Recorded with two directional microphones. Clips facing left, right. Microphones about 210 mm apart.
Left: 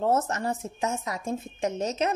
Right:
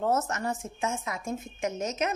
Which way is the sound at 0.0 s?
30° left (ahead or behind).